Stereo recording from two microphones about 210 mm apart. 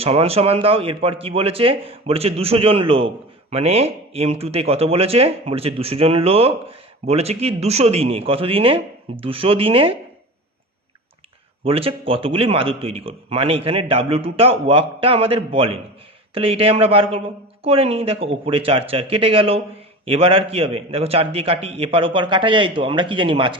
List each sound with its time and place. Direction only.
0.0 s a man's voice: 30° right (ahead or behind)
11.6 s a man's voice: 25° right (ahead or behind)